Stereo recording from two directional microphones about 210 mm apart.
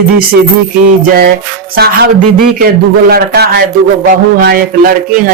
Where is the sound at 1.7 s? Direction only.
50° right (ahead or behind).